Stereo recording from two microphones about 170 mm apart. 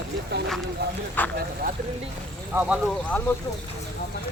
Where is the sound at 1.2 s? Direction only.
10° left (ahead or behind).